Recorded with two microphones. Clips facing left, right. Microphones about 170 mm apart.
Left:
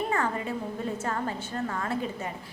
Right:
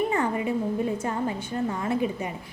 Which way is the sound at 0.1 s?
15° right (ahead or behind).